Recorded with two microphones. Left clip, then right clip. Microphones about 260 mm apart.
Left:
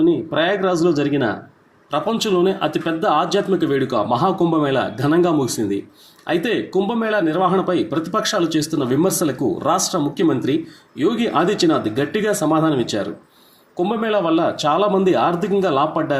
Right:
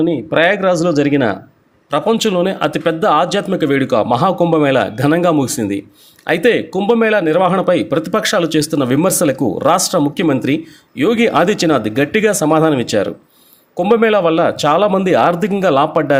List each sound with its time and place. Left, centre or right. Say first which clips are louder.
0.0 s speech: right 4 dB; right